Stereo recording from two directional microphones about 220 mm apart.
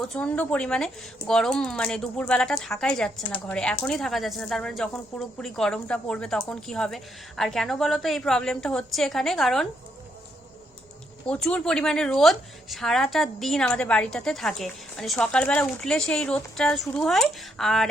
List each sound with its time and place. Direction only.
0.0 s a woman's voice: 5° left (ahead or behind)
11.3 s a woman's voice: 5° left (ahead or behind)